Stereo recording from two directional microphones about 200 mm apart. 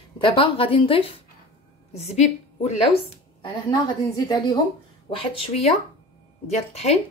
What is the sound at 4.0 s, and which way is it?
Speech, 15° left (ahead or behind).